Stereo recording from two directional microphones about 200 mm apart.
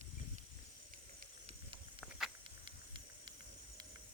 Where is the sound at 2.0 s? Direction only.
Centre (ahead or behind).